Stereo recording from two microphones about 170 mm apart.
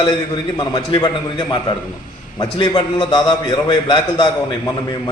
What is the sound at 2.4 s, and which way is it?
A man's voice, 25° left (ahead or behind).